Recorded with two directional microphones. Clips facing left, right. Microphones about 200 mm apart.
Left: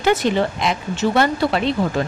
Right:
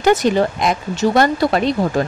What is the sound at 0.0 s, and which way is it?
Speech, 45° right (ahead or behind).